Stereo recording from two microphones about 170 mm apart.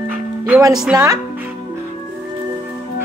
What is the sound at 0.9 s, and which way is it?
Speech, 20° right (ahead or behind).